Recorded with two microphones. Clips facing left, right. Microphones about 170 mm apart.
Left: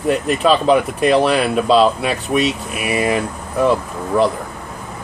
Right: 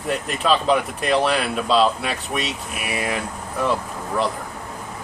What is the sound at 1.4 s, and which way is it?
Speech, 50° left (ahead or behind).